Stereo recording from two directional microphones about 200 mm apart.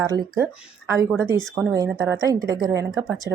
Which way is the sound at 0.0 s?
15° right (ahead or behind).